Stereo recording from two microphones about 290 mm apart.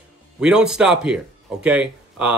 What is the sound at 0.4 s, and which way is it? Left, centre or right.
Speech, centre.